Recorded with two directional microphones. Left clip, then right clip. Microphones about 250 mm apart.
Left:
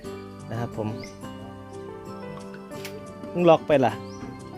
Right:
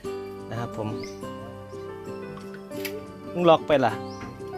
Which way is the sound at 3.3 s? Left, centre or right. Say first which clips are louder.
Left 1 dB; centre.